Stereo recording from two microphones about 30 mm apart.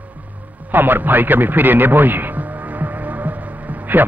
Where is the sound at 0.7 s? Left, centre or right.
Right.